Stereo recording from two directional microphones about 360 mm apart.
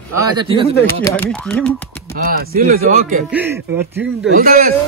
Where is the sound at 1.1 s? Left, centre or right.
Centre.